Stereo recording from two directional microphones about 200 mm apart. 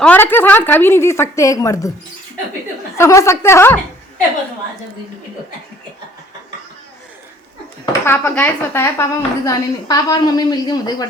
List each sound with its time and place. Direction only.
0.0 s a woman's voice: 10° left (ahead or behind)
2.9 s a woman's voice: 15° left (ahead or behind)
8.0 s a woman's voice: 10° left (ahead or behind)